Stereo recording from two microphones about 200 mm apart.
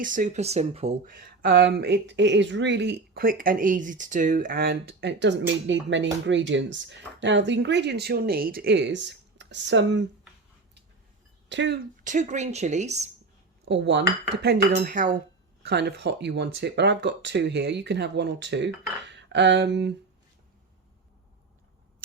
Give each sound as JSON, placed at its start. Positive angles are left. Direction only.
{"t": 0.0, "sound": "a woman's voice", "side_deg": -40}
{"t": 1.0, "sound": "speech", "side_deg": -45}
{"t": 1.4, "sound": "speech", "side_deg": -55}
{"t": 11.4, "sound": "speech", "side_deg": -60}
{"t": 12.0, "sound": "a woman's voice", "side_deg": -35}
{"t": 13.7, "sound": "speech", "side_deg": -60}
{"t": 14.7, "sound": "a woman's voice", "side_deg": -40}
{"t": 15.6, "sound": "speech", "side_deg": -60}